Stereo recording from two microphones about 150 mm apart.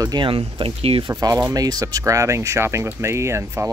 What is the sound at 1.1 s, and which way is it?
Speech, 25° right (ahead or behind).